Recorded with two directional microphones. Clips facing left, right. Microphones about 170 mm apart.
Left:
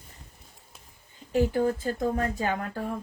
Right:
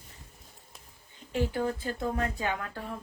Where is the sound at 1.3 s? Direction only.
40° left (ahead or behind).